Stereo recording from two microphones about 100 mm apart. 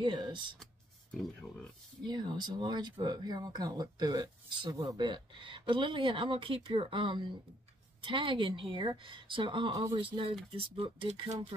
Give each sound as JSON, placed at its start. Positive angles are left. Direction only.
{"t": 0.0, "sound": "speech", "side_deg": -50}
{"t": 2.0, "sound": "a woman's voice", "side_deg": -50}